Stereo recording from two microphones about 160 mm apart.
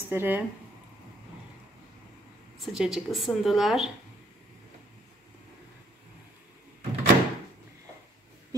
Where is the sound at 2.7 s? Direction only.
5° right (ahead or behind).